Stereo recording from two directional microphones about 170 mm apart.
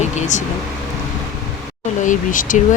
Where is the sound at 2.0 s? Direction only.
50° left (ahead or behind).